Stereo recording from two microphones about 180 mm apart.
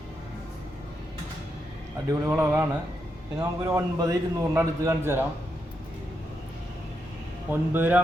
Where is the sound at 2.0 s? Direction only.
15° right (ahead or behind).